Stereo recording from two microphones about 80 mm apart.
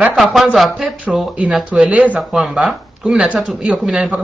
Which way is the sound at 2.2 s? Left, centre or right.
Centre.